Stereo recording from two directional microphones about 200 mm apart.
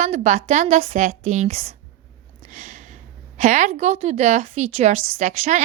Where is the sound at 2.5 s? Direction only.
40° right (ahead or behind).